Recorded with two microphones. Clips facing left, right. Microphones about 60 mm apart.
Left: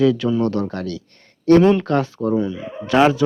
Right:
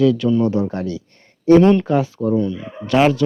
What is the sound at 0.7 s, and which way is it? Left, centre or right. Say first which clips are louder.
Speech: right 2 dB; right.